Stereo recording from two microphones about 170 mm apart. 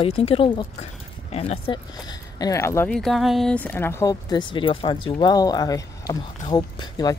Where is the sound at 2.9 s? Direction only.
Centre (ahead or behind).